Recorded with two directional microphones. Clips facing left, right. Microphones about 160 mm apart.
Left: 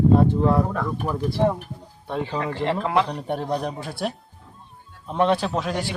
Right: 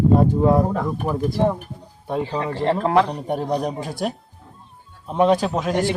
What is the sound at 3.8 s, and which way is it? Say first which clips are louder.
Speech: right 3 dB; 45° right (ahead or behind).